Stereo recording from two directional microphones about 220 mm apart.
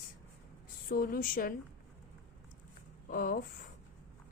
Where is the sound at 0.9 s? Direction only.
40° left (ahead or behind).